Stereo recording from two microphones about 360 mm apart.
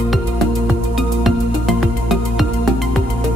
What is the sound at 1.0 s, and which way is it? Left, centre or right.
Music, centre.